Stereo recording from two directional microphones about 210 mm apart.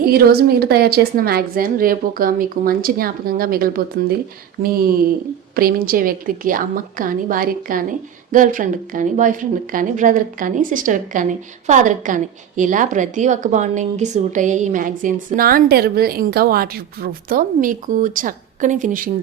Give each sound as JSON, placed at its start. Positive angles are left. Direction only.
{"t": 0.0, "sound": "a woman's voice", "side_deg": -45}